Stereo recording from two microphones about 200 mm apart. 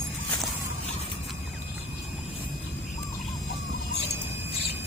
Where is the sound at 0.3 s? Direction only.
Centre (ahead or behind).